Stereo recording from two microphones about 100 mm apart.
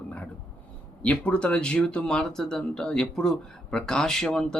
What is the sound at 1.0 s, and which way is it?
Speech, 15° left (ahead or behind).